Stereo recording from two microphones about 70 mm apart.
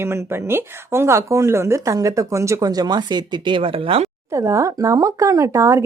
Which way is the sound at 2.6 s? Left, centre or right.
Right.